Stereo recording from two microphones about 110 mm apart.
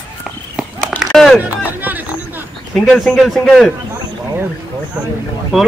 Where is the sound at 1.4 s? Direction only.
15° right (ahead or behind).